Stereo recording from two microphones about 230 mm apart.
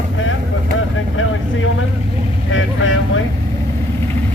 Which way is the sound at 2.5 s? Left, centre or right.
Left.